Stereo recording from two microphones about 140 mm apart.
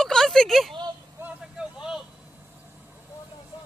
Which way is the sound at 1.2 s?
15° right (ahead or behind).